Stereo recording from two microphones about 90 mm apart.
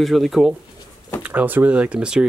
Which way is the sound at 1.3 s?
20° right (ahead or behind).